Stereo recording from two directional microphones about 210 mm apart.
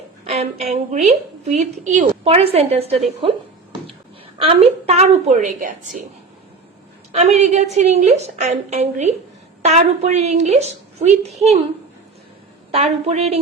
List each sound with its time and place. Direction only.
0.3 s a woman's voice: 30° right (ahead or behind)
4.4 s a woman's voice: 30° right (ahead or behind)
7.1 s a woman's voice: 30° right (ahead or behind)
12.7 s a woman's voice: 30° right (ahead or behind)